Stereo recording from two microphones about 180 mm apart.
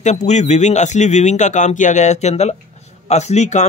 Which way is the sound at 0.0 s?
40° left (ahead or behind).